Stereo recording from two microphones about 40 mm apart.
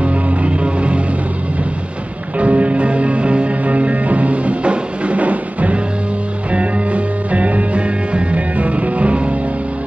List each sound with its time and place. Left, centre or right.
0.0 s music: right
2.3 s music: right